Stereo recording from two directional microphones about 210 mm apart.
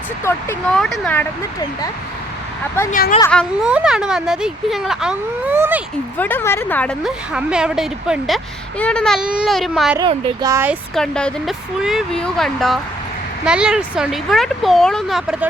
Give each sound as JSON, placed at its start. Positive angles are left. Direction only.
{"t": 0.3, "sound": "speech", "side_deg": 5}
{"t": 2.9, "sound": "speech", "side_deg": 40}
{"t": 3.2, "sound": "speech", "side_deg": 10}
{"t": 3.6, "sound": "speech", "side_deg": -5}
{"t": 6.1, "sound": "speech", "side_deg": 10}
{"t": 7.3, "sound": "speech", "side_deg": -5}
{"t": 10.0, "sound": "speech", "side_deg": -15}
{"t": 10.9, "sound": "speech", "side_deg": 5}